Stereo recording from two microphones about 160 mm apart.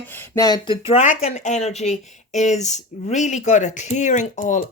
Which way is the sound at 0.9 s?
50° left (ahead or behind).